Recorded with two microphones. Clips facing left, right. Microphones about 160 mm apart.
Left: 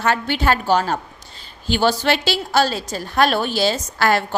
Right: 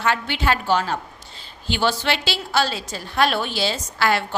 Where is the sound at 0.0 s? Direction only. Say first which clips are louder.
Left 3 dB; 45° left (ahead or behind).